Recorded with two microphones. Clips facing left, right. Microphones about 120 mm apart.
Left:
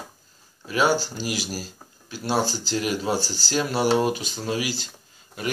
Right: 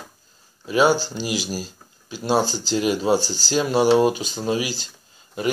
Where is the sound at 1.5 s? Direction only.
25° right (ahead or behind).